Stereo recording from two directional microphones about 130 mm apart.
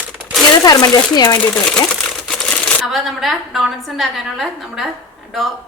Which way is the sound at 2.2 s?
5° left (ahead or behind).